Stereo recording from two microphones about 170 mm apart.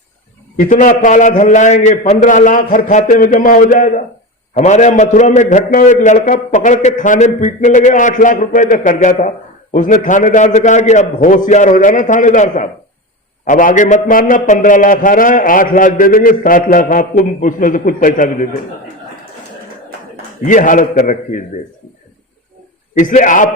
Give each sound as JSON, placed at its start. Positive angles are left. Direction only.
{"t": 0.6, "sound": "a man's voice", "side_deg": 50}
{"t": 20.4, "sound": "a man's voice", "side_deg": 50}
{"t": 23.0, "sound": "a man's voice", "side_deg": 50}